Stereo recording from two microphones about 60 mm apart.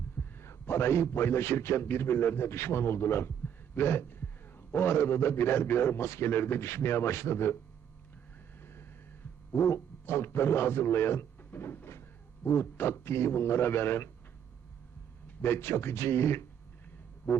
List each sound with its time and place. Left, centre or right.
0.2 s a man's voice: left
8.6 s vehicle: left
9.5 s a man's voice: left
15.4 s a man's voice: left